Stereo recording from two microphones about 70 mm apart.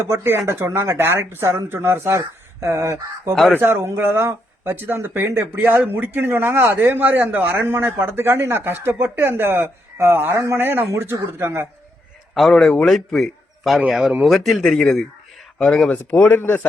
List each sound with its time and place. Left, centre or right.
0.0 s a man's voice: right
3.6 s a man's voice: right
11.1 s a man's voice: right
12.3 s a man's voice: centre
15.9 s speech: left